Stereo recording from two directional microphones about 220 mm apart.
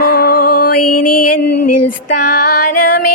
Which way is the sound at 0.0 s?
45° left (ahead or behind).